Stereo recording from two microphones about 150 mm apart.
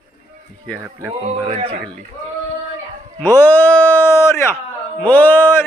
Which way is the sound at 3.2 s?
15° left (ahead or behind).